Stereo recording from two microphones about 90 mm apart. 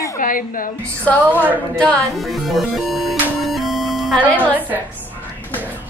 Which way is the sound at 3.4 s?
Centre (ahead or behind).